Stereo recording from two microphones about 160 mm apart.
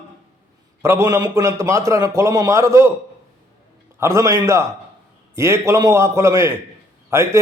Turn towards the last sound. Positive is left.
turn(degrees=-15)  # may be behind; listen again after turning